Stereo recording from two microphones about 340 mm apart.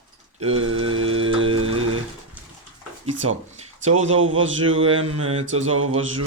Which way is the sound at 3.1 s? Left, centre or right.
Right.